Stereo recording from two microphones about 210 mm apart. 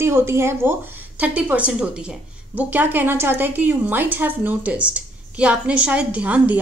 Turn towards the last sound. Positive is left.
turn(degrees=-5)  # may be behind; listen again after turning